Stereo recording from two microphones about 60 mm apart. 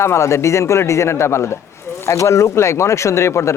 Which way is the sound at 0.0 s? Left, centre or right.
Left.